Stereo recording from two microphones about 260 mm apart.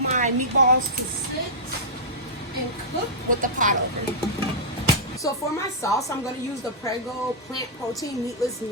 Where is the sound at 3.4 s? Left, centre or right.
Right.